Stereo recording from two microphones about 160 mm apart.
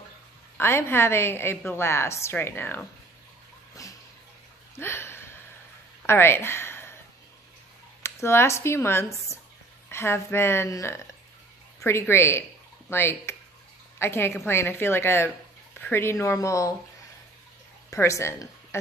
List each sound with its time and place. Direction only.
0.6 s a woman's voice: 15° left (ahead or behind)
3.8 s a sound: 20° left (ahead or behind)
6.0 s speech: 15° left (ahead or behind)
8.0 s a woman's voice: 15° left (ahead or behind)
17.8 s speech: 20° left (ahead or behind)